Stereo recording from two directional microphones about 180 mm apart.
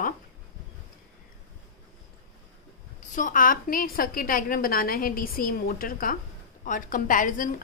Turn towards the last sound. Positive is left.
turn(degrees=45)  # may be behind; listen again after turning